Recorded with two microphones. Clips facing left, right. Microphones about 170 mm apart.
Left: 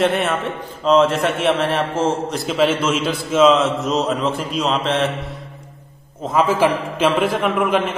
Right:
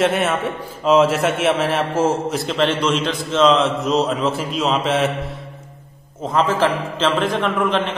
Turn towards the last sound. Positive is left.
turn(degrees=10)  # may be behind; listen again after turning